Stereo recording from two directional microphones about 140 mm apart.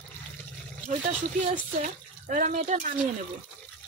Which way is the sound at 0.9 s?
65° right (ahead or behind).